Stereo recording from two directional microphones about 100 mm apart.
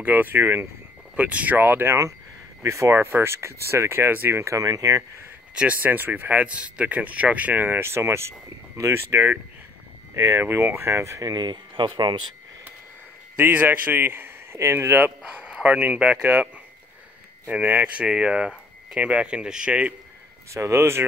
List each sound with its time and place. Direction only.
0.0 s speech: 20° right (ahead or behind); by 5.0 s 35° right (ahead or behind)
5.5 s speech: 10° right (ahead or behind); by 12.4 s 50° right (ahead or behind)
13.4 s speech: 20° right (ahead or behind)
15.2 s speech: 10° right (ahead or behind)
17.5 s speech: 15° right (ahead or behind)
20.5 s speech: 30° right (ahead or behind)